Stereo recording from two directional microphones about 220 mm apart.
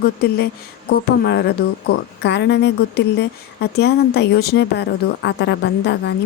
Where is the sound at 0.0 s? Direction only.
45° left (ahead or behind).